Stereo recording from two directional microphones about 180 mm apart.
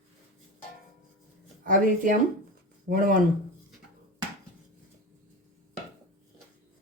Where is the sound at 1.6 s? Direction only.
50° right (ahead or behind).